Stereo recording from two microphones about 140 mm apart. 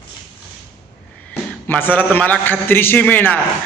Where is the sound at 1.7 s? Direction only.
15° left (ahead or behind).